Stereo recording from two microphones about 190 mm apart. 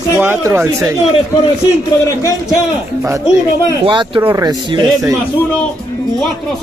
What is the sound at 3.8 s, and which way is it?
Speech, 25° right (ahead or behind).